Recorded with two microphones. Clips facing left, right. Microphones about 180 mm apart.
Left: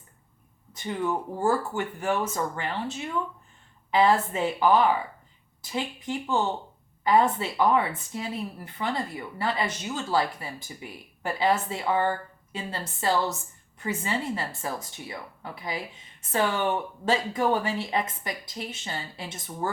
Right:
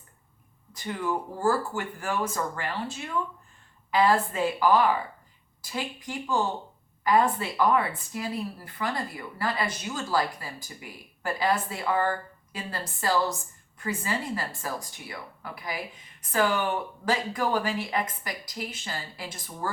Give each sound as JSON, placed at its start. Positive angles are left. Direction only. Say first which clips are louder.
{"t": 0.7, "sound": "speech", "louder": "left 2 dB", "side_deg": 20}